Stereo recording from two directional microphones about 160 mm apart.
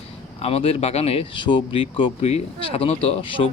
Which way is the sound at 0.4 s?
35° left (ahead or behind).